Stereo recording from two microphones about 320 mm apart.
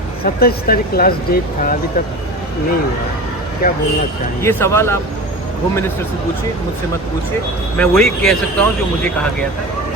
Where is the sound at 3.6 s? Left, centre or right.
Left.